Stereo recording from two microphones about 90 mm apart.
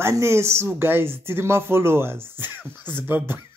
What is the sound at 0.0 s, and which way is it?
Speech, 30° right (ahead or behind).